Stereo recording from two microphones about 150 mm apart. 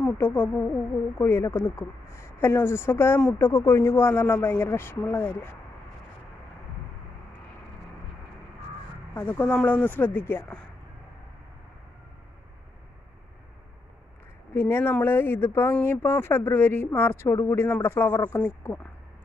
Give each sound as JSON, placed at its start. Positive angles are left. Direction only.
{"t": 0.0, "sound": "speech", "side_deg": 15}
{"t": 9.1, "sound": "speech", "side_deg": 10}
{"t": 14.5, "sound": "speech", "side_deg": 15}